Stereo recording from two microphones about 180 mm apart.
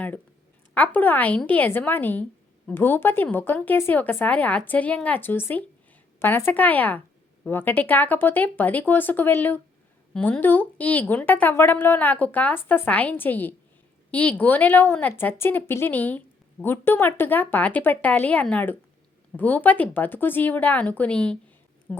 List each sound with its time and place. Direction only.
0.7 s a woman's voice: 10° left (ahead or behind)